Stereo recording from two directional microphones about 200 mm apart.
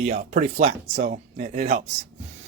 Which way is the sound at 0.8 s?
50° right (ahead or behind).